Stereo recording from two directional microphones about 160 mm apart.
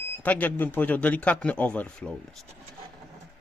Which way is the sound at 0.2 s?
10° left (ahead or behind).